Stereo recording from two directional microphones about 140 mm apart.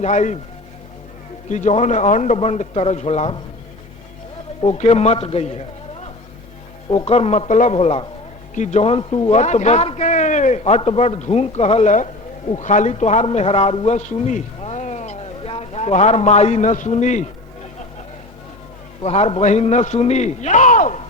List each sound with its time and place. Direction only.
0.0 s a man's voice: 55° left (ahead or behind)
1.5 s a man's voice: 55° left (ahead or behind)
4.6 s a man's voice: 50° left (ahead or behind)
6.9 s a man's voice: 45° left (ahead or behind)
14.2 s a sound: 55° left (ahead or behind)
19.0 s a man's voice: 50° left (ahead or behind); by 21.0 s 65° left (ahead or behind)